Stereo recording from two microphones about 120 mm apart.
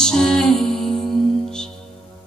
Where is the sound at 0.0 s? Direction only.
5° left (ahead or behind).